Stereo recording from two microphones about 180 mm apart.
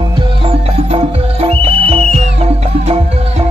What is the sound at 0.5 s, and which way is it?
Music, 35° right (ahead or behind).